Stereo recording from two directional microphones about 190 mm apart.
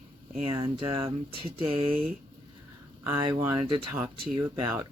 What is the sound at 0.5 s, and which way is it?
Speech, 20° right (ahead or behind).